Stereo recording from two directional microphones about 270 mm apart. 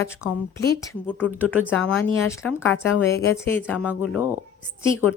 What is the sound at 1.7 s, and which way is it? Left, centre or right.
Speech, centre.